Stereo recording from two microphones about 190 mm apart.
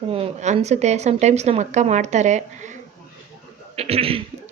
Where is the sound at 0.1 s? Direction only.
35° right (ahead or behind).